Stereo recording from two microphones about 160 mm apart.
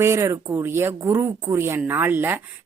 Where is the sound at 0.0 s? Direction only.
20° right (ahead or behind).